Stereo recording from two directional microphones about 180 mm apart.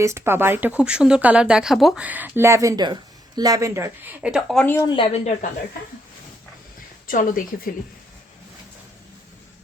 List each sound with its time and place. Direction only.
0.0 s speech: 15° right (ahead or behind); by 4.7 s centre (ahead or behind)
4.8 s a woman's voice: 25° left (ahead or behind)
7.1 s speech: 50° left (ahead or behind)